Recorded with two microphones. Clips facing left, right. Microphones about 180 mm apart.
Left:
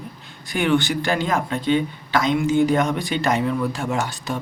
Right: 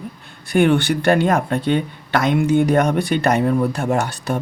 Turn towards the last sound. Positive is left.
turn(degrees=-60)  # may be behind; listen again after turning